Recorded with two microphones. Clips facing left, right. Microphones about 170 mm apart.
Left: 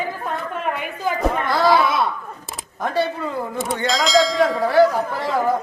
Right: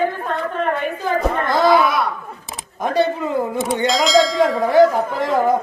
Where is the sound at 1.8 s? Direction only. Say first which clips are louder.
Right 1 dB; 25° left (ahead or behind).